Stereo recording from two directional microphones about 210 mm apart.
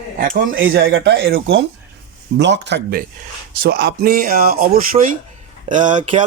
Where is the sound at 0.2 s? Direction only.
40° right (ahead or behind).